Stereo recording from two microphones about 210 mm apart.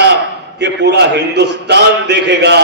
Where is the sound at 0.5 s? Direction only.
55° right (ahead or behind).